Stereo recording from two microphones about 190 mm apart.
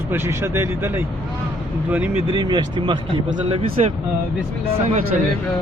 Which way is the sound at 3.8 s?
35° right (ahead or behind).